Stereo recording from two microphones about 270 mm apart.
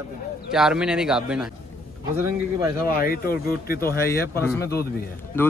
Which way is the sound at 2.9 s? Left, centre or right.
Left.